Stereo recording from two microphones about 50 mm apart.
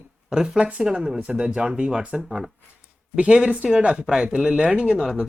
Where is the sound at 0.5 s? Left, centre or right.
Right.